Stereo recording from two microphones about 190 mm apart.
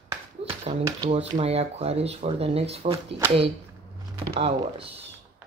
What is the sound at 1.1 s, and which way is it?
Speech, 35° right (ahead or behind).